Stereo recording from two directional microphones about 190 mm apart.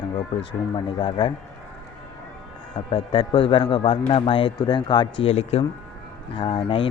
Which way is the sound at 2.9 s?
30° left (ahead or behind).